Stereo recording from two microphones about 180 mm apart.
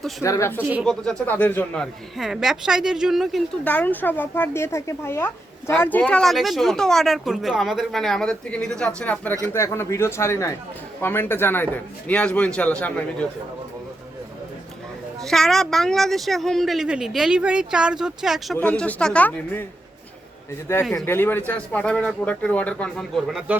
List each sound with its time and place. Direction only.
0.2 s a man's voice: 15° left (ahead or behind)
15.2 s speech: centre (ahead or behind)
18.5 s a man's voice: 10° left (ahead or behind)
20.9 s a man's voice: 10° left (ahead or behind)